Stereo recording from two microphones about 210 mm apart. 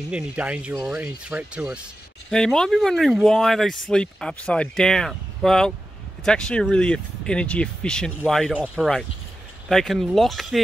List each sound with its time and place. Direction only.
0.1 s speech: 5° right (ahead or behind)